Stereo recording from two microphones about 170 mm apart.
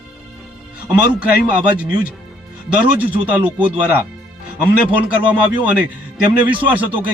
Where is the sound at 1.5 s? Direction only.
10° right (ahead or behind).